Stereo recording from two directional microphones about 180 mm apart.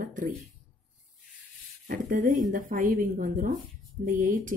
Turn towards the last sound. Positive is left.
turn(degrees=-50)  # may be behind; listen again after turning